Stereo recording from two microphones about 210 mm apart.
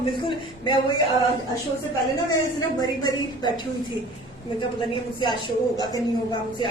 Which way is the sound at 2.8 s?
20° left (ahead or behind).